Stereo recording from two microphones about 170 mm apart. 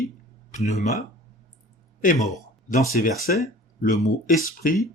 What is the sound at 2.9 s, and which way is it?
Speech, 60° left (ahead or behind).